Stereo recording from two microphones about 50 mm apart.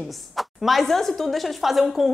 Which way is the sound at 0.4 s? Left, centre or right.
Centre.